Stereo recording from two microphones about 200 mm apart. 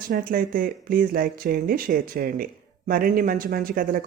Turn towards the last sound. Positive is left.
turn(degrees=-45)  # may be behind; listen again after turning